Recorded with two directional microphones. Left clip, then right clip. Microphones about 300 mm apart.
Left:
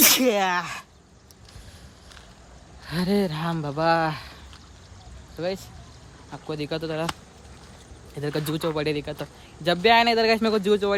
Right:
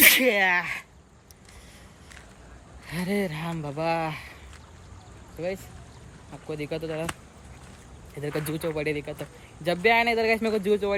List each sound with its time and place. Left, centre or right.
0.0 s sneeze: centre
0.6 s speech: centre
2.9 s speech: centre
6.3 s speech: centre
8.2 s speech: centre